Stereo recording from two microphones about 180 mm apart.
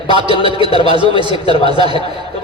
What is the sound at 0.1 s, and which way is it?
Speech, 25° right (ahead or behind).